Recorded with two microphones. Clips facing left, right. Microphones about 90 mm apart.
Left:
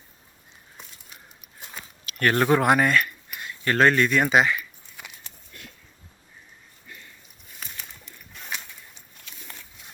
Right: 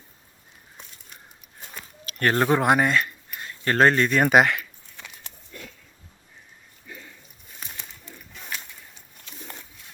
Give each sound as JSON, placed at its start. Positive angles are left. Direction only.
{"t": 2.0, "sound": "speech", "side_deg": -30}
{"t": 4.3, "sound": "speech", "side_deg": -60}
{"t": 5.0, "sound": "a sound", "side_deg": 10}